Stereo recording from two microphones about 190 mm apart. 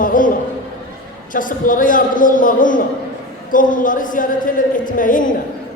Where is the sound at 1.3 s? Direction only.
45° left (ahead or behind).